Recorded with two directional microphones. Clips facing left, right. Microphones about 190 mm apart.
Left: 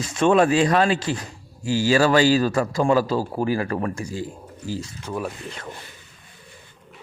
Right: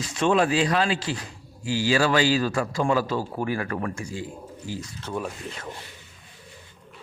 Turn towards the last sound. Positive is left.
turn(degrees=0)  # may be behind; listen again after turning